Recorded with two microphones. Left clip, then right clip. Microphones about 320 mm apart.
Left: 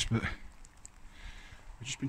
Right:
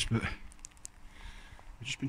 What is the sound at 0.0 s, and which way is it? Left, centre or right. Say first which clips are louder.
Speech: even; centre.